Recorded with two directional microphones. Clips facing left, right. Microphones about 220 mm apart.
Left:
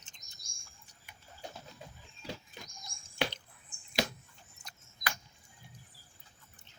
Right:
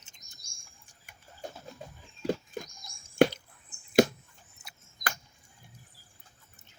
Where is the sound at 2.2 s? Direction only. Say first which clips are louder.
Right 13 dB; 50° right (ahead or behind).